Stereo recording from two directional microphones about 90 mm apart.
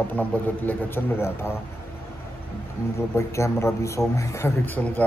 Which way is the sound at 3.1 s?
30° left (ahead or behind).